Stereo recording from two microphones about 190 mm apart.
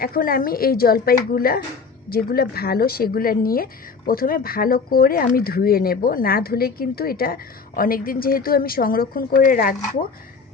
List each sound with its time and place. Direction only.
0.0 s speech: 50° left (ahead or behind)